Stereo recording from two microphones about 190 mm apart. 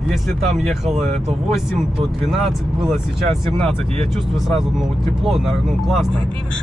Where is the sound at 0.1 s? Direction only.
Centre (ahead or behind).